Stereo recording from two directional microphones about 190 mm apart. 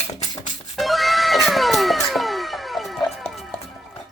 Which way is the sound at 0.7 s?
Centre (ahead or behind).